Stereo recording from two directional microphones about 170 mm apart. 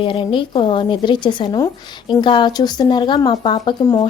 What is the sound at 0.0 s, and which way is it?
A woman's voice, 30° left (ahead or behind).